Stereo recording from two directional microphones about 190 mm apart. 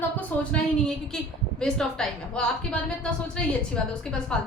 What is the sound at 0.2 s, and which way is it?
A woman's voice, 5° left (ahead or behind).